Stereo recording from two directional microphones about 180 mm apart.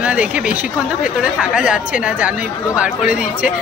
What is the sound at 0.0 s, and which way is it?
Speech, 5° right (ahead or behind).